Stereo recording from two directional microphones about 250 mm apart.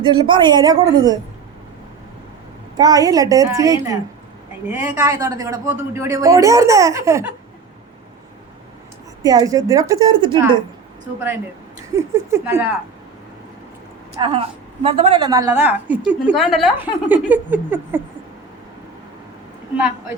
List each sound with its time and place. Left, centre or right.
0.0 s a woman's voice: centre
2.7 s a woman's voice: centre
9.2 s a woman's voice: centre
11.9 s a woman's voice: centre
14.2 s a woman's voice: right